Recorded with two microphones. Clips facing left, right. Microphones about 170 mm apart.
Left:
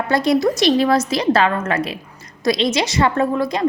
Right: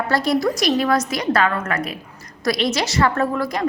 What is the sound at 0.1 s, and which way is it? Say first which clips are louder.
A woman's voice: left 4 dB; 20° left (ahead or behind).